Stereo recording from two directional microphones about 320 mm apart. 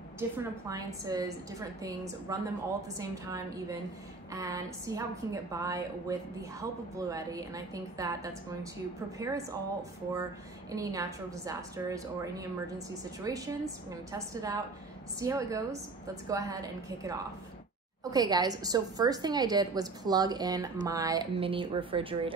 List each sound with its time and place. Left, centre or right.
0.2 s a woman's voice: centre